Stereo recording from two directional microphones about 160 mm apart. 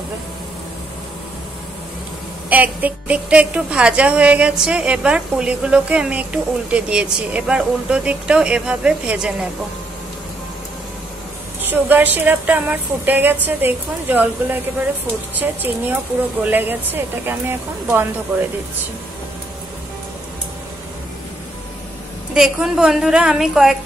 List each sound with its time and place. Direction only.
2.5 s a woman's voice: 10° right (ahead or behind)
11.7 s a woman's voice: 10° right (ahead or behind)
22.3 s a woman's voice: 5° right (ahead or behind)